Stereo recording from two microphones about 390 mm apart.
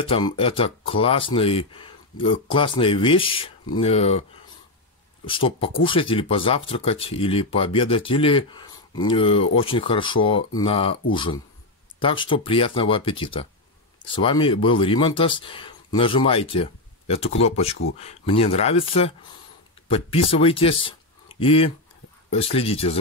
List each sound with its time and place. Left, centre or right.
0.0 s speech: centre